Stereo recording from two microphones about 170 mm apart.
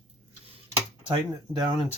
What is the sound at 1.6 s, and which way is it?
Speech, 25° right (ahead or behind).